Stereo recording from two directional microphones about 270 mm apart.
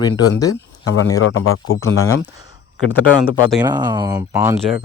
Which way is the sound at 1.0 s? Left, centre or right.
Left.